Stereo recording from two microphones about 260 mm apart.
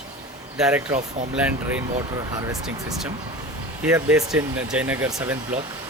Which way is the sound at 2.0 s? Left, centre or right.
Centre.